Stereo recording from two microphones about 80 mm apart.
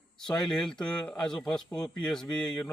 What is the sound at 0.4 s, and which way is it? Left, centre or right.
Speech, centre.